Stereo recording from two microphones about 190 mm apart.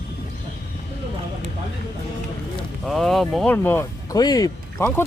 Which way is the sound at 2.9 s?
Centre (ahead or behind).